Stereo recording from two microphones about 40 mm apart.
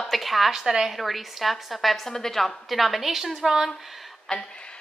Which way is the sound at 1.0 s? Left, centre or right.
Centre.